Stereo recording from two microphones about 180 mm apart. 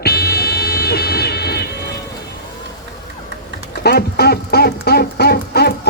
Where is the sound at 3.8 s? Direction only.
60° left (ahead or behind).